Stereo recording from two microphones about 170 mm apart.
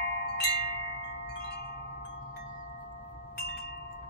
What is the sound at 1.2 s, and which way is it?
Chime, 80° left.